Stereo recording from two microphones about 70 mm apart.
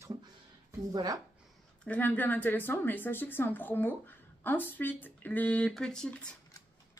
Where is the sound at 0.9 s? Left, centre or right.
Right.